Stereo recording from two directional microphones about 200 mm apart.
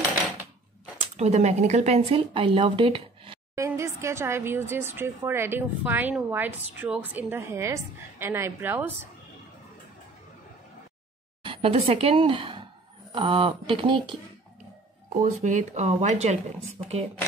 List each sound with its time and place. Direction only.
1.1 s a woman's voice: 35° right (ahead or behind)
3.5 s speech: 15° right (ahead or behind)
11.4 s a woman's voice: 25° right (ahead or behind)
15.2 s a woman's voice: 35° right (ahead or behind)